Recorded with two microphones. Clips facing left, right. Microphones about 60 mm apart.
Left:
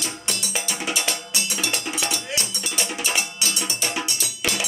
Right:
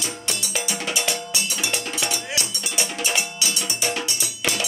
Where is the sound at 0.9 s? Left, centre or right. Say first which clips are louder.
Right 1 dB; centre.